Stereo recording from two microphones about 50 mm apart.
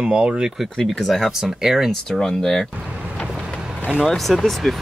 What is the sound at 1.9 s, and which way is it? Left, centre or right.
Speech, centre.